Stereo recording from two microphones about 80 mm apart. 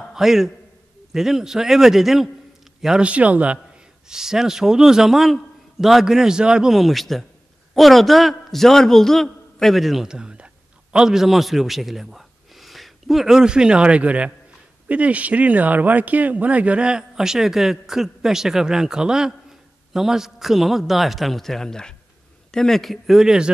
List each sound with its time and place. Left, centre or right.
0.1 s a man's voice: centre
4.1 s a man's voice: centre